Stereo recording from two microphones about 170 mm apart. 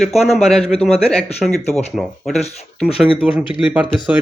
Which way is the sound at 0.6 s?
35° left (ahead or behind).